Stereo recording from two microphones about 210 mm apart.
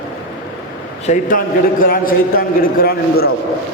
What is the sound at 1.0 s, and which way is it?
A man's voice, 35° left (ahead or behind).